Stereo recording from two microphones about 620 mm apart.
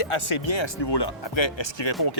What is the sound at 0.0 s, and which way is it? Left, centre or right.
Speech, left.